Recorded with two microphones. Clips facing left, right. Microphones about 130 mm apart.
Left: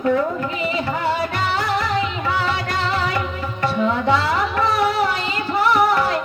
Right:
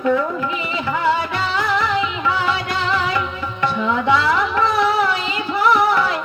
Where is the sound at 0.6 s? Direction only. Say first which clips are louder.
Right 1 dB; 40° left (ahead or behind).